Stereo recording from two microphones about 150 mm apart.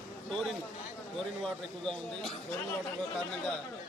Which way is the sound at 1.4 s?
5° left (ahead or behind).